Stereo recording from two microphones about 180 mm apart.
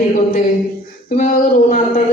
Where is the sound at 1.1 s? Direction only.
50° left (ahead or behind).